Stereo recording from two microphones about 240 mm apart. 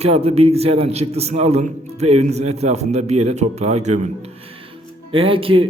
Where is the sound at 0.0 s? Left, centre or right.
Right.